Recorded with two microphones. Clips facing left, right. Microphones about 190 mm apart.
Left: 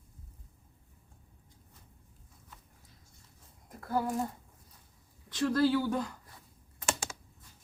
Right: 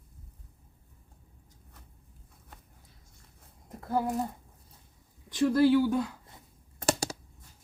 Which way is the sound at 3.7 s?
25° right (ahead or behind).